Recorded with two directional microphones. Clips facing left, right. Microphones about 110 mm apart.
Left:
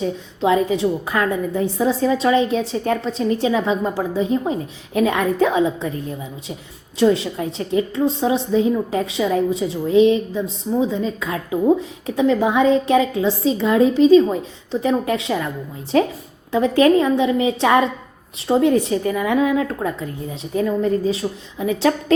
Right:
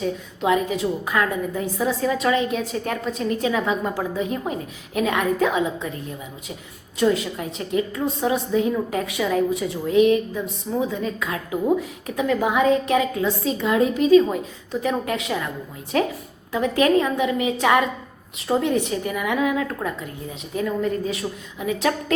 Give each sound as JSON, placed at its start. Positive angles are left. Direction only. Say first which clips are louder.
{"t": 0.0, "sound": "a woman's voice", "louder": "left 3 dB", "side_deg": 30}
{"t": 7.0, "sound": "a woman's voice", "louder": "left 4 dB", "side_deg": 30}